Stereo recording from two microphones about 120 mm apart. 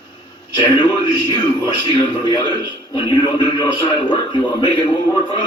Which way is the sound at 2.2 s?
40° left (ahead or behind).